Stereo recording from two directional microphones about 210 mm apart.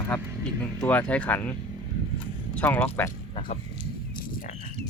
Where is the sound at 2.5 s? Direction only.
10° left (ahead or behind).